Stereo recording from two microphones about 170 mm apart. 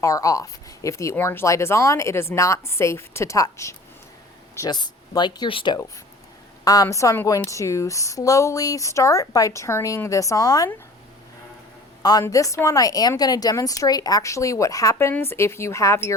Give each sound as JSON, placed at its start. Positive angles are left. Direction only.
{"t": 0.0, "sound": "a woman's voice", "side_deg": 20}
{"t": 12.0, "sound": "a woman's voice", "side_deg": 20}